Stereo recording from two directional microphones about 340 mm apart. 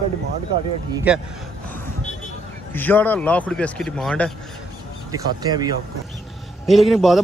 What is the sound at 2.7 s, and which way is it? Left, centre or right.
Speech, centre.